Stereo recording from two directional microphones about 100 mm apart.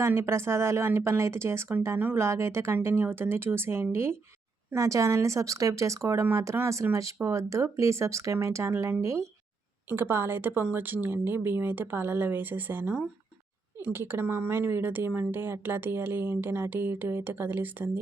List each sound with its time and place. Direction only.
0.0 s speech: 25° right (ahead or behind)